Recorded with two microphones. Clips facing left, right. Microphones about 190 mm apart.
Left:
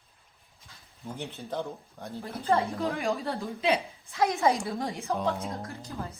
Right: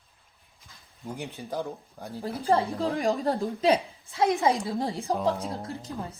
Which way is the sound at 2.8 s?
35° right (ahead or behind).